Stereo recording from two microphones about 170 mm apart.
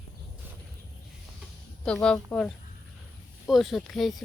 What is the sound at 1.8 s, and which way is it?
Speech, 5° left (ahead or behind).